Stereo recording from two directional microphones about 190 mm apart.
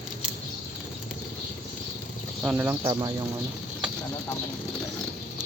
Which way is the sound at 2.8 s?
25° right (ahead or behind).